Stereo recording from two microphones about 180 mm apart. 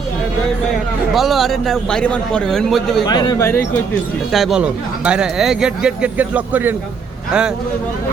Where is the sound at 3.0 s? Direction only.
20° left (ahead or behind).